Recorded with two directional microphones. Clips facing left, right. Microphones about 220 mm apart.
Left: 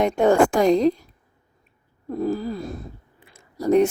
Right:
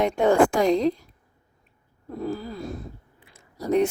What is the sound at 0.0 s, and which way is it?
Speech, 45° left (ahead or behind).